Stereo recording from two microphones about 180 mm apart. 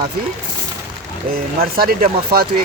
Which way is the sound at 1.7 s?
55° right (ahead or behind).